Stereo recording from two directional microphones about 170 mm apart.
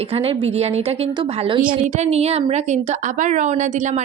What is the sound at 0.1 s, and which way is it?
A woman's voice, 35° right (ahead or behind).